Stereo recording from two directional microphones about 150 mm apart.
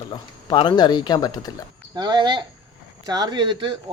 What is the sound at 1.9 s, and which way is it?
Speech, 30° right (ahead or behind).